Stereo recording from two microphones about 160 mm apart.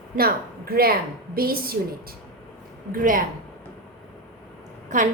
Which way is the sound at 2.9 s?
60° right (ahead or behind).